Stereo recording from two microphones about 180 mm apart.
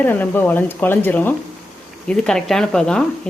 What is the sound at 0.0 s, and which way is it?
Speech, 10° left (ahead or behind).